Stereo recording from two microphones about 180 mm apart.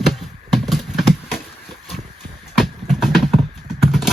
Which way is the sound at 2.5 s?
Centre (ahead or behind).